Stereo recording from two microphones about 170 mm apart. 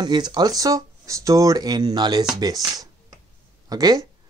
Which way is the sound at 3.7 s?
20° right (ahead or behind).